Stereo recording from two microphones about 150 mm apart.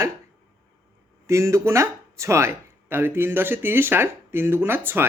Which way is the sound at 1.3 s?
20° right (ahead or behind).